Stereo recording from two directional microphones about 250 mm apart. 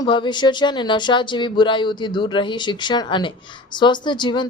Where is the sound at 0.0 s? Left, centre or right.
Centre.